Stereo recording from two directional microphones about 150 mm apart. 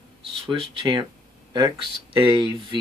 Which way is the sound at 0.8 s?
30° right (ahead or behind).